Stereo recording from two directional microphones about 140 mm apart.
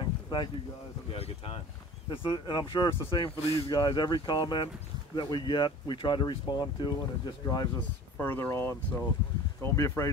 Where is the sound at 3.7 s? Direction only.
30° left (ahead or behind).